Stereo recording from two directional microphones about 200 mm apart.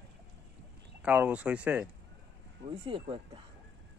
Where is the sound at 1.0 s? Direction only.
5° right (ahead or behind).